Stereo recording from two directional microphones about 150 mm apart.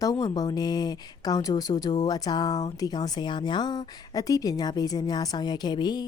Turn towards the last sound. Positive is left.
turn(degrees=30)  # may be behind; listen again after turning